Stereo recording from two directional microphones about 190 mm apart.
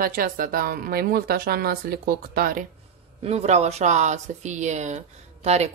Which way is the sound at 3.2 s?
35° right (ahead or behind).